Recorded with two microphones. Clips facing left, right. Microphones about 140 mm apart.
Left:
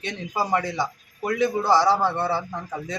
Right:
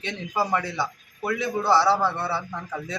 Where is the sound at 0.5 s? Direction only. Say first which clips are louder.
Left 2 dB; 40° left (ahead or behind).